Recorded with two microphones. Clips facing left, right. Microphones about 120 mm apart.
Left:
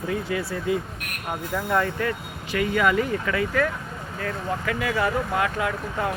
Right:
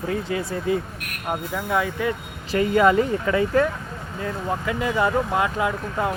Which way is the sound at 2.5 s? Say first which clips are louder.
Right 4 dB; 30° right (ahead or behind).